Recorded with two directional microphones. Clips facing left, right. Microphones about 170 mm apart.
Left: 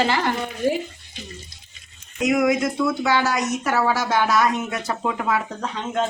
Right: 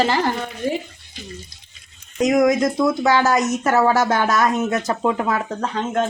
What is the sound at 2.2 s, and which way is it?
Speech, 40° right (ahead or behind).